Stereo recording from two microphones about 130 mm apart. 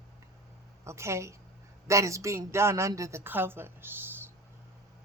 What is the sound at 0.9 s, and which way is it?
Speech, 20° right (ahead or behind).